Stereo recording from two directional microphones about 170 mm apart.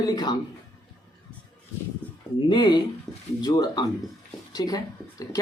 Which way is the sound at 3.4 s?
25° left (ahead or behind).